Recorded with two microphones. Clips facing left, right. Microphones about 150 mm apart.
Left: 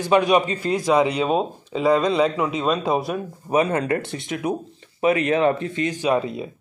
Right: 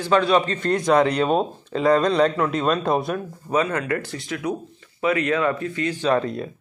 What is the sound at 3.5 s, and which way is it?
Speech, 20° left (ahead or behind).